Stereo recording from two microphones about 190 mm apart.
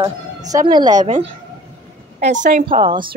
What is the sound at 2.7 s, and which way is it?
Speech, 25° right (ahead or behind).